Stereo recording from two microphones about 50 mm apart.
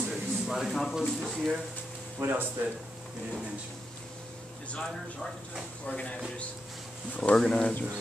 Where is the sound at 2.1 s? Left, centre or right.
Right.